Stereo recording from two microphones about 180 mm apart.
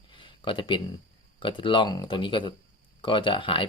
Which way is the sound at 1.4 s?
25° left (ahead or behind).